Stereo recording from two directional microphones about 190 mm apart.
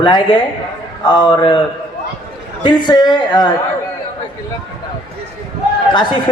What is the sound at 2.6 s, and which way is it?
Speech, 20° left (ahead or behind).